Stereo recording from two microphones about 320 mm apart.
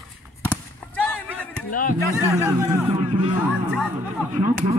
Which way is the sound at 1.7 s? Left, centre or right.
Left.